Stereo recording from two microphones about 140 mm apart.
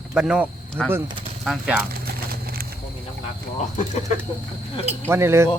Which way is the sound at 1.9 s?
90° right.